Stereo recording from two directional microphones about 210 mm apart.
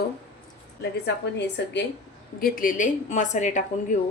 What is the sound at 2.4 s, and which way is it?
A woman's voice, 40° left (ahead or behind).